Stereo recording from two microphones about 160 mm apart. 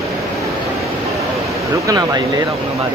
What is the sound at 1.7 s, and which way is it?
Speech, 20° right (ahead or behind).